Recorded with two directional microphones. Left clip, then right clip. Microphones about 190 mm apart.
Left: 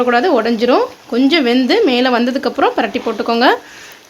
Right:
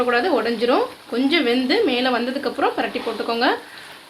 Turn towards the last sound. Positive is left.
turn(degrees=60)  # may be behind; listen again after turning